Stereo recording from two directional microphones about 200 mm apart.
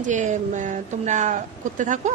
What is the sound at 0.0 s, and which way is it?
A woman's voice, 40° right (ahead or behind).